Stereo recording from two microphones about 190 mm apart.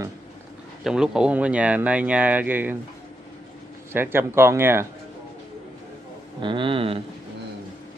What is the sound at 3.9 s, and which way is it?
Speech, 10° right (ahead or behind).